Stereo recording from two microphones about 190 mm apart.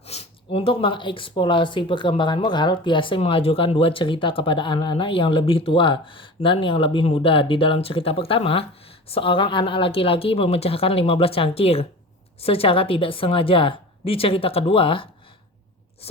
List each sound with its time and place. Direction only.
0.0 s speech: 35° left (ahead or behind)